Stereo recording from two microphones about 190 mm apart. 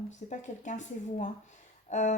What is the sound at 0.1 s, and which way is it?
A woman's voice, 40° left (ahead or behind).